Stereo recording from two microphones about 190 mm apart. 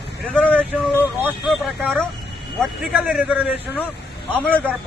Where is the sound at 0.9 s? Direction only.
10° right (ahead or behind).